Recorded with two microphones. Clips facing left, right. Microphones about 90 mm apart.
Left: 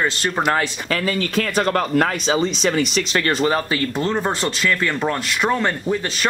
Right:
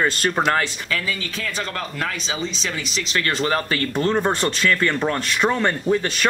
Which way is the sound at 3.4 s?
20° left (ahead or behind).